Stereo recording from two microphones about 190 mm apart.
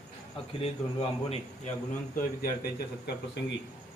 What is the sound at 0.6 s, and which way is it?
Speech, 30° left (ahead or behind).